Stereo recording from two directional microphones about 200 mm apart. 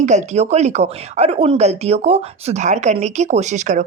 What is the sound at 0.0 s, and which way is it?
Speech, 35° right (ahead or behind).